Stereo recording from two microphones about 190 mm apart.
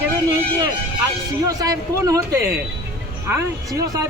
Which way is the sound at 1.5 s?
20° right (ahead or behind).